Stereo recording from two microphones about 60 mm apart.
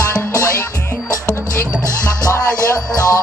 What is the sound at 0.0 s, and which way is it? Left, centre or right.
Music, left.